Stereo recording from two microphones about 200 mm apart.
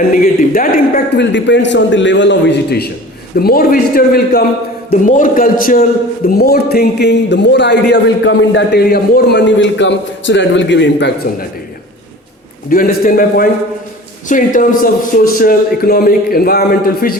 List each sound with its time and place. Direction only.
0.1 s a man's voice: 45° left (ahead or behind)
12.7 s a man's voice: 45° left (ahead or behind)